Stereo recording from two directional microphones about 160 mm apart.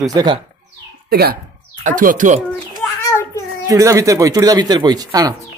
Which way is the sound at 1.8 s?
55° right (ahead or behind).